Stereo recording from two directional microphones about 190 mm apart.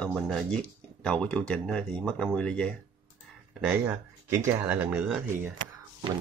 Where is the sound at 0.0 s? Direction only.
5° left (ahead or behind).